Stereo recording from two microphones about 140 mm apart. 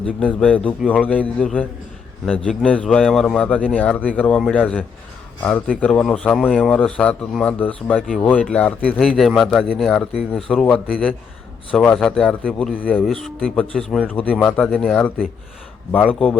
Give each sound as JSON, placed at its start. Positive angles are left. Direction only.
{"t": 0.0, "sound": "a man's voice", "side_deg": 10}